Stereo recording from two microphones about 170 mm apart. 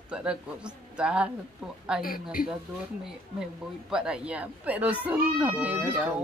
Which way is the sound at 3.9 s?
5° right (ahead or behind).